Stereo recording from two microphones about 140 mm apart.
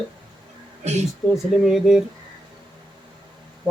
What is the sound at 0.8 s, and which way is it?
Speech, 55° right (ahead or behind).